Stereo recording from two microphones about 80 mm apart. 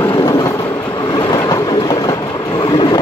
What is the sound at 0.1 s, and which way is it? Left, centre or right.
Train, left.